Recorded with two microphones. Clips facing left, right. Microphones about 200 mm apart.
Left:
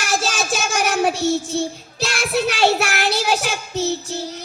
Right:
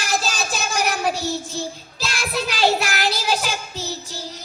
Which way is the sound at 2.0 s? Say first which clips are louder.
Left 6 dB; 65° left (ahead or behind).